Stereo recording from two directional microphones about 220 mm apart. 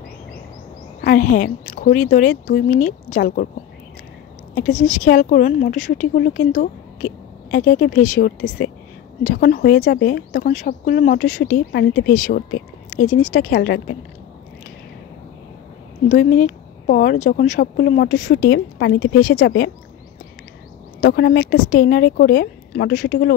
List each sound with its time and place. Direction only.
1.0 s speech: 40° left (ahead or behind)
4.6 s speech: 35° left (ahead or behind)
9.2 s speech: 40° left (ahead or behind)
16.1 s a woman's voice: 35° left (ahead or behind)
21.0 s a woman's voice: 50° left (ahead or behind)